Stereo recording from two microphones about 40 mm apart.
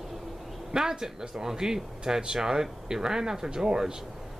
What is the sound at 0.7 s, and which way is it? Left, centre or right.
Speech, centre.